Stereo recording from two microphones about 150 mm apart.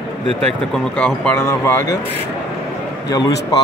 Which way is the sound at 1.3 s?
15° left (ahead or behind).